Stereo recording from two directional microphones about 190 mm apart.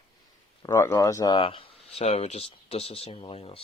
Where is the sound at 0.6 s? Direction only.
15° left (ahead or behind).